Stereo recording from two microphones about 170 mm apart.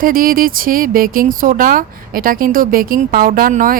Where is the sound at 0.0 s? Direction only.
55° right (ahead or behind).